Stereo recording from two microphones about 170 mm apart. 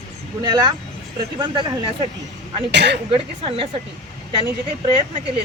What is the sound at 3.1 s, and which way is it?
Speech, 30° right (ahead or behind).